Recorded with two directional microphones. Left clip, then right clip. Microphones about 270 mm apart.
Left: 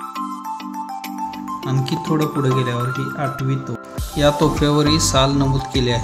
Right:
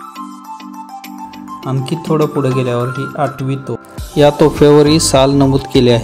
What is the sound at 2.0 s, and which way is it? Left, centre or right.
Speech, centre.